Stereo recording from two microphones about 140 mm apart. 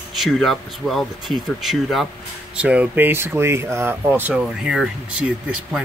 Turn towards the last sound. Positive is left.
turn(degrees=-5)  # may be behind; listen again after turning